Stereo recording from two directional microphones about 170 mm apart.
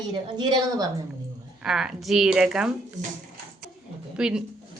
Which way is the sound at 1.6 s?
5° right (ahead or behind).